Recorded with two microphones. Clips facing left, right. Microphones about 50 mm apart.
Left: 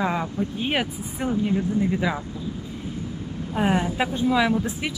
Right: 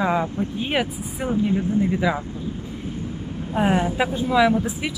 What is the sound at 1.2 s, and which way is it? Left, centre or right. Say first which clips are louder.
Speech: right 2 dB; right.